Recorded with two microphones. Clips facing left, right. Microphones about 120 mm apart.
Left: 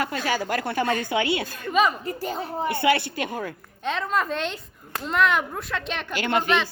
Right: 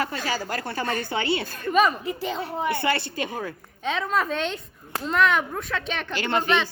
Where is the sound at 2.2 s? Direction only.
40° left (ahead or behind).